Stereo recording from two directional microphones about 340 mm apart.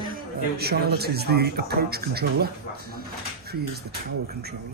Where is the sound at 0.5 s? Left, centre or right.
Right.